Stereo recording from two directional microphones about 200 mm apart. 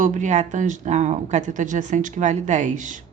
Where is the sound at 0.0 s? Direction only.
40° right (ahead or behind).